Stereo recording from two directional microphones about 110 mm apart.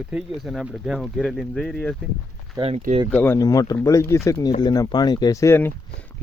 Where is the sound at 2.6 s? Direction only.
65° right (ahead or behind).